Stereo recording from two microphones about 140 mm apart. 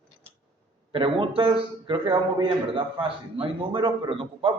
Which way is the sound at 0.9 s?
35° right (ahead or behind).